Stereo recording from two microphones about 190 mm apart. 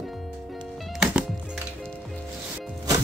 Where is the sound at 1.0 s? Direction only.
5° right (ahead or behind).